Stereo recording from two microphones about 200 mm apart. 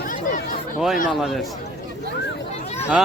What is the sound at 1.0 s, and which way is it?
Speech, centre (ahead or behind).